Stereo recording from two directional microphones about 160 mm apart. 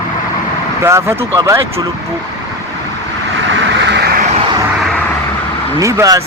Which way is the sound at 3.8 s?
90° right.